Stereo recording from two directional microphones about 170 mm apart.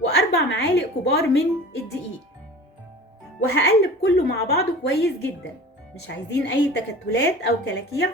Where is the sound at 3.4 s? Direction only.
75° left (ahead or behind).